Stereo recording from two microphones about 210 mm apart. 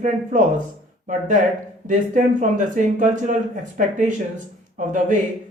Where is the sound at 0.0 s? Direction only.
35° right (ahead or behind).